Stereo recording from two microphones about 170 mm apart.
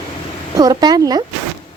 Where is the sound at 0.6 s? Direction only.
20° right (ahead or behind).